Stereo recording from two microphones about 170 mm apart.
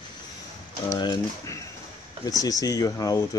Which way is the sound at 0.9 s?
25° left (ahead or behind).